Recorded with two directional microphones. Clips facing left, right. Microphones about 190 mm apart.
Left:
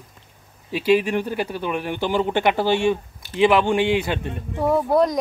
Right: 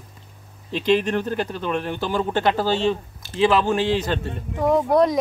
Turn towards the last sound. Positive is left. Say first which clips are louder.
# right 1 dB
turn(degrees=5)  # may be behind; listen again after turning